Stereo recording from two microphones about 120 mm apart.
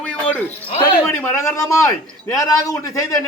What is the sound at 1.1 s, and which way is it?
A man's voice, 15° left (ahead or behind).